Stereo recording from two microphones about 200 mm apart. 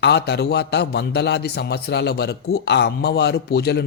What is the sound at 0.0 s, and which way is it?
A man's voice, 55° left (ahead or behind).